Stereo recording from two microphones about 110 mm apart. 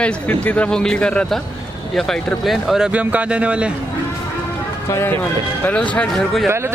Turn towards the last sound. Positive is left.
turn(degrees=10)  # may be behind; listen again after turning